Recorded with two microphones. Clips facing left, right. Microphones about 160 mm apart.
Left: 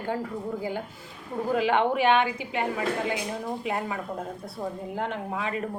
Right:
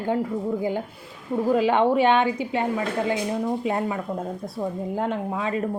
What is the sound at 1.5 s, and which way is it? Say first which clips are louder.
Speech: right 3 dB; 25° right (ahead or behind).